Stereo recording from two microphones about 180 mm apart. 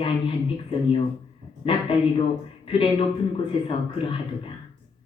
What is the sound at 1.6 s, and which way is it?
Speech, 30° left (ahead or behind).